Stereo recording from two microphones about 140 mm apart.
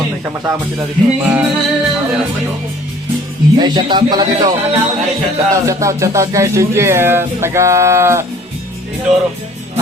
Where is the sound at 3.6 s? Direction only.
35° right (ahead or behind).